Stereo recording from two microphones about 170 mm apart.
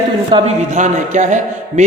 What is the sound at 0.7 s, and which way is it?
Speech, 45° right (ahead or behind).